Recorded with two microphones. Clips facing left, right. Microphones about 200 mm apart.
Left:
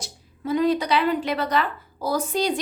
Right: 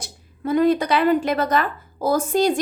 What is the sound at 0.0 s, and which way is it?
A woman's voice, 55° right (ahead or behind).